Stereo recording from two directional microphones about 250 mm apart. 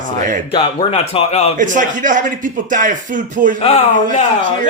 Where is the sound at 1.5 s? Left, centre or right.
Right.